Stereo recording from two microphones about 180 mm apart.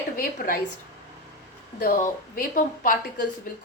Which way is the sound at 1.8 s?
50° left (ahead or behind).